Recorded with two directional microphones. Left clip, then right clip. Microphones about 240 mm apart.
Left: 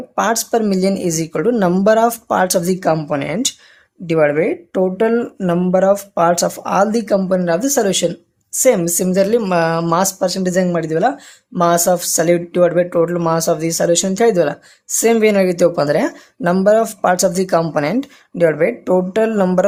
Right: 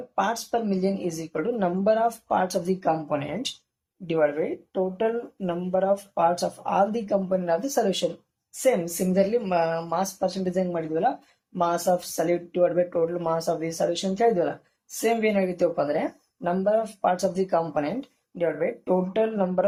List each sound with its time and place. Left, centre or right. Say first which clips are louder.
0.2 s speech: left 9 dB; left